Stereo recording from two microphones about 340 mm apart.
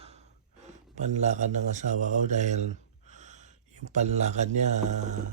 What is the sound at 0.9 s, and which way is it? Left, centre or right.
Speech, right.